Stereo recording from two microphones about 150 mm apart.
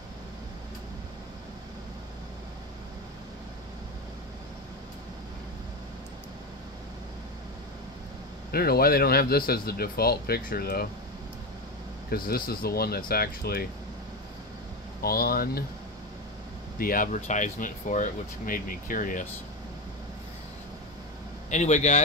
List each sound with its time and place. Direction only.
8.5 s speech: 90° left
12.1 s speech: 90° left
15.0 s speech: 85° left
16.7 s speech: 70° left (ahead or behind)
21.5 s speech: 50° left (ahead or behind)